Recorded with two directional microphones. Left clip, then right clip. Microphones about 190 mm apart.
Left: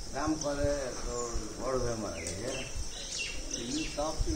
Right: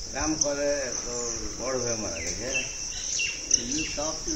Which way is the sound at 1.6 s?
45° right (ahead or behind).